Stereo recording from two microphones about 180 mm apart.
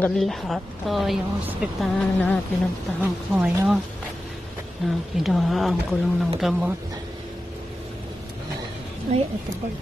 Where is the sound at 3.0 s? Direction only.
10° right (ahead or behind).